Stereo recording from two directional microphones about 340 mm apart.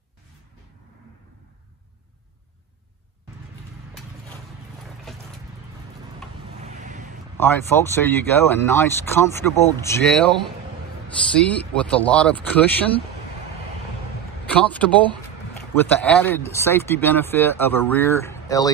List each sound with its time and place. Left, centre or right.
7.3 s speech: centre
11.4 s speech: centre
14.5 s speech: centre